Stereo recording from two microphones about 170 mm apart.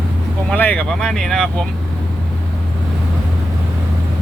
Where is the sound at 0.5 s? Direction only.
10° left (ahead or behind).